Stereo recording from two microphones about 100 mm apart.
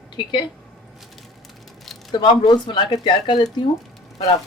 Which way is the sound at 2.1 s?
50° left (ahead or behind).